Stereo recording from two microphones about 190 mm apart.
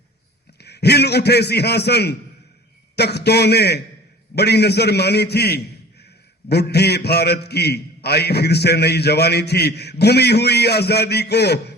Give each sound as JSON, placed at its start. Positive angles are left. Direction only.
{"t": 0.6, "sound": "a man's voice", "side_deg": 60}